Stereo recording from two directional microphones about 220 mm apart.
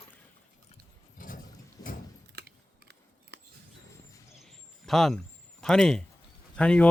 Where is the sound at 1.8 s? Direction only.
15° left (ahead or behind).